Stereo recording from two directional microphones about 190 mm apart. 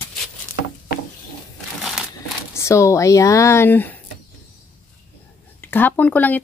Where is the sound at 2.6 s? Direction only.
15° left (ahead or behind).